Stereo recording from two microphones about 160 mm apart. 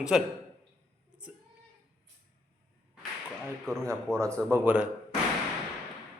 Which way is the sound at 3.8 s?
20° right (ahead or behind).